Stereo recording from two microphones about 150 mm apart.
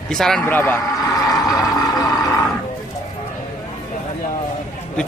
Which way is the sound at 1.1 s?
25° left (ahead or behind).